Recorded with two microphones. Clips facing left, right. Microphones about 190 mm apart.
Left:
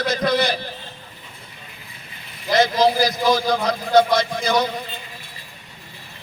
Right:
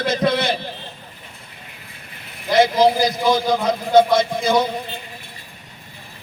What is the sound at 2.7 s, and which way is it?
Speech, 20° right (ahead or behind).